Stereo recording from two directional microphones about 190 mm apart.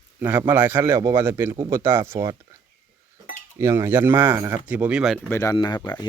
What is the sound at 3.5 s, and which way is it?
A man's voice, 15° right (ahead or behind).